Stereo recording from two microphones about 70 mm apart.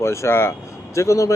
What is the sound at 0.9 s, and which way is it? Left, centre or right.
Speech, left.